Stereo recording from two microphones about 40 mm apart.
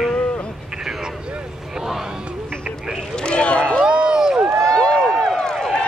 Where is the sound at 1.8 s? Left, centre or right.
Centre.